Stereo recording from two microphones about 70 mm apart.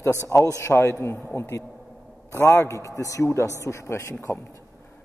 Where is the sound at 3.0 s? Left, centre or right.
Left.